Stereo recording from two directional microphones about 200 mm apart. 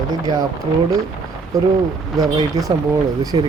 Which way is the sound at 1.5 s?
15° right (ahead or behind).